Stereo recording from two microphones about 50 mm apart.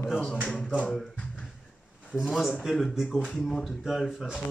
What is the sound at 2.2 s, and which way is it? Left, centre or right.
Speech, centre.